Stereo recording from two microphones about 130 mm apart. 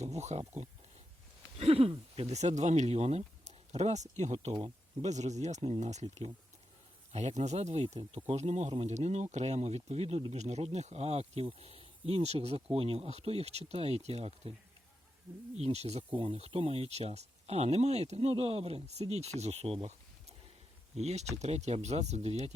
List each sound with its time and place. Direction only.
0.0 s speech: 60° right (ahead or behind)
1.5 s speech: 50° right (ahead or behind)
2.1 s speech: 60° right (ahead or behind)
7.9 s speech: 50° right (ahead or behind)
15.5 s speech: 55° right (ahead or behind)
16.1 s speech: 45° right (ahead or behind)
20.9 s speech: 55° right (ahead or behind)